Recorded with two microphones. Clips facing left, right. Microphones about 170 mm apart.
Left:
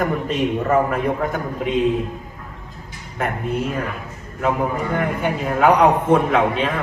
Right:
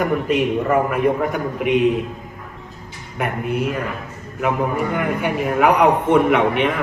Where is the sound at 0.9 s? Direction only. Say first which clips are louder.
Right 3 dB; 15° right (ahead or behind).